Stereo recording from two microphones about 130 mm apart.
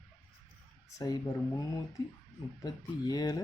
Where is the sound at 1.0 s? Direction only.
30° left (ahead or behind).